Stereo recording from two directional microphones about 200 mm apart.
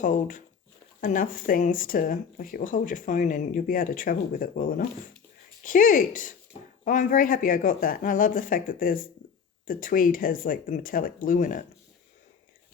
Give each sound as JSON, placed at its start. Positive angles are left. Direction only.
{"t": 0.0, "sound": "speech", "side_deg": 40}